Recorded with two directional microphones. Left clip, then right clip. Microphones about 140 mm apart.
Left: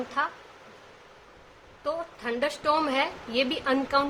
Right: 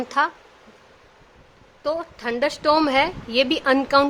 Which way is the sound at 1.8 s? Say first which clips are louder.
Right 6 dB; 80° right.